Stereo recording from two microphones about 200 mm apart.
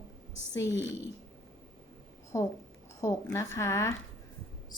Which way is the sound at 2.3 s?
15° left (ahead or behind).